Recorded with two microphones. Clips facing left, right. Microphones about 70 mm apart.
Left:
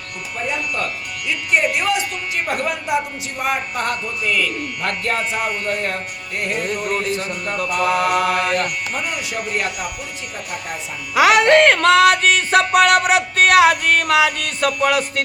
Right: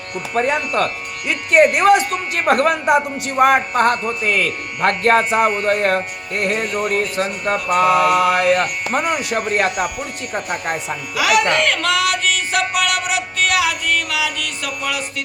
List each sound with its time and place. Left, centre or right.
0.3 s mantra: right
1.3 s a man's voice: right
2.5 s a man's voice: right
7.4 s mantra: right
7.9 s mantra: right
8.9 s a man's voice: right
9.4 s mantra: right
10.3 s speech: right
11.1 s music: left